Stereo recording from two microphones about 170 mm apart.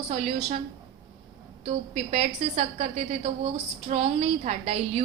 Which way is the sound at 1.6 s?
40° right (ahead or behind).